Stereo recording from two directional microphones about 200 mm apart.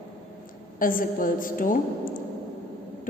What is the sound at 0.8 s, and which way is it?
A woman's voice, 45° left (ahead or behind).